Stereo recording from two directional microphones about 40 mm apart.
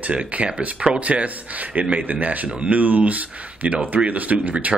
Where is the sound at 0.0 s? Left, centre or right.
Right.